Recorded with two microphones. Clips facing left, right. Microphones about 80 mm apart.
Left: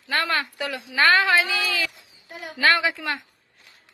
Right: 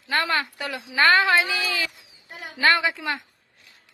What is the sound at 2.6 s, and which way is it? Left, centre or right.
Speech, centre.